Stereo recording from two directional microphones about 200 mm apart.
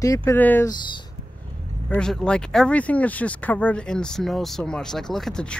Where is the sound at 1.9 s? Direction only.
5° left (ahead or behind).